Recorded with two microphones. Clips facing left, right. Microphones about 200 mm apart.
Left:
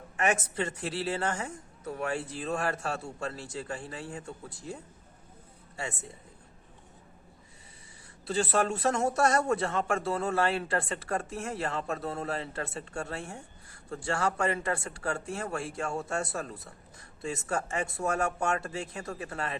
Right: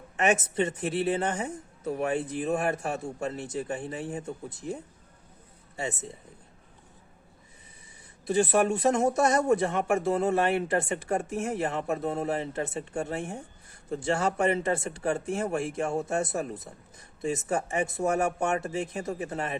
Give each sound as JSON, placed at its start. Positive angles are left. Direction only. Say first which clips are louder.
{"t": 0.2, "sound": "speech", "louder": "right 4 dB", "side_deg": -20}
{"t": 8.3, "sound": "speech", "louder": "right 4 dB", "side_deg": -15}